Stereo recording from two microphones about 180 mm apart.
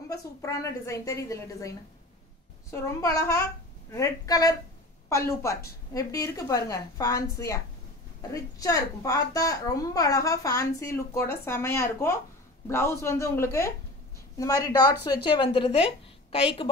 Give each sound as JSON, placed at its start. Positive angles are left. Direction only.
{"t": 0.1, "sound": "a child's voice", "side_deg": 15}